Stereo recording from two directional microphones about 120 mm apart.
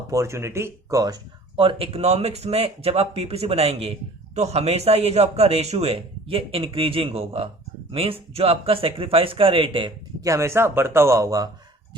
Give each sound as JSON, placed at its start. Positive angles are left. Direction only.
{"t": 0.1, "sound": "speech", "side_deg": -25}
{"t": 1.5, "sound": "a man's voice", "side_deg": -50}
{"t": 10.2, "sound": "speech", "side_deg": -25}